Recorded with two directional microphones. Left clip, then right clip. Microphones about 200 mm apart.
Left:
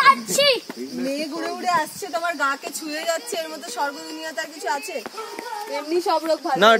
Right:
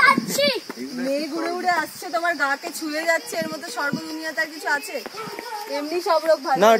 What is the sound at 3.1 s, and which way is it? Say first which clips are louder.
Speech: right 3 dB; 50° left (ahead or behind).